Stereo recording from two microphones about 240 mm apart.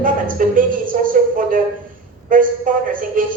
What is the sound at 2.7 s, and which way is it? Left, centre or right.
Speech, right.